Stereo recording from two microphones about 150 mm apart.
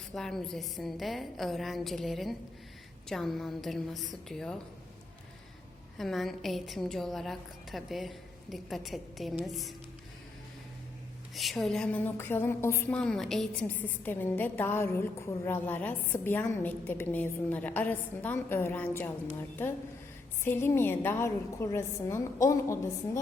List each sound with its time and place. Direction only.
0.1 s a woman's voice: centre (ahead or behind)
6.0 s a woman's voice: centre (ahead or behind)
11.3 s a woman's voice: centre (ahead or behind); by 12.9 s 15° left (ahead or behind)
12.9 s a woman's voice: 5° left (ahead or behind)